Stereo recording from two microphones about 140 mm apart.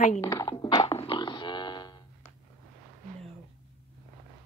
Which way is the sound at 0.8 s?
40° left (ahead or behind).